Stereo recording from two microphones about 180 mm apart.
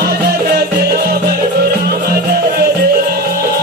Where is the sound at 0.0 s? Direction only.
60° right (ahead or behind).